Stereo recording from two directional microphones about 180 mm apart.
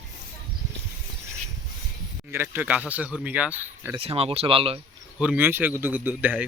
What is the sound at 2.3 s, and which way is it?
Speech, 10° right (ahead or behind).